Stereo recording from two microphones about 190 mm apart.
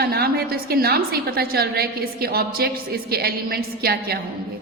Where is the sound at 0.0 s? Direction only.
55° right (ahead or behind).